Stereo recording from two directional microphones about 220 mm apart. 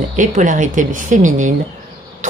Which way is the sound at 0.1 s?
35° right (ahead or behind).